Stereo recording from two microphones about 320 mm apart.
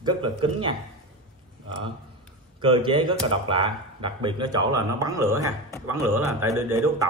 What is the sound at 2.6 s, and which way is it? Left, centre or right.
Speech, centre.